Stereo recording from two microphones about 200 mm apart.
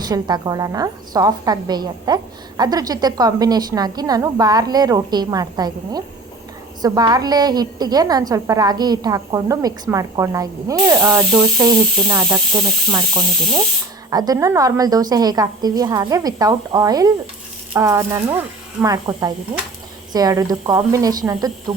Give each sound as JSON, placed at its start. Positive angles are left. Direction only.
{"t": 0.0, "sound": "a woman's voice", "side_deg": -20}